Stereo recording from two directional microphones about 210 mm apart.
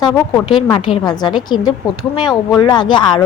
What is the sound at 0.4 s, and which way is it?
A woman's voice, 25° left (ahead or behind).